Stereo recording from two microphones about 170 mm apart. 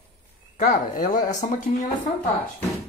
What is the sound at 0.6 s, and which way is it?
Speech, 55° left (ahead or behind).